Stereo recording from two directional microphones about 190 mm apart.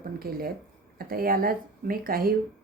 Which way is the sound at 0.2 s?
55° right (ahead or behind).